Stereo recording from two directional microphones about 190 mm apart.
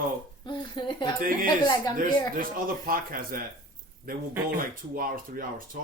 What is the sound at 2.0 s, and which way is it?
Speech, 45° right (ahead or behind).